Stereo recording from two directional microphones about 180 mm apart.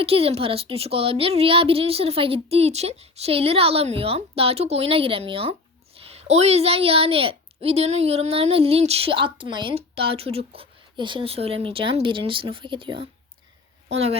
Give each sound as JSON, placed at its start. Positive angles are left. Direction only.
{"t": 0.0, "sound": "a woman's voice", "side_deg": -35}